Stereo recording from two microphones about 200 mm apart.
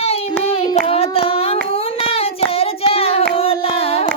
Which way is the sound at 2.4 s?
30° left (ahead or behind).